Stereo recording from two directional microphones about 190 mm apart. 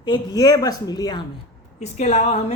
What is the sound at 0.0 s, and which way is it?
Speech, 20° left (ahead or behind).